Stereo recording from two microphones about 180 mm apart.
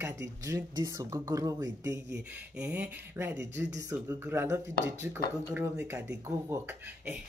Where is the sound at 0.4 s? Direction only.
20° right (ahead or behind).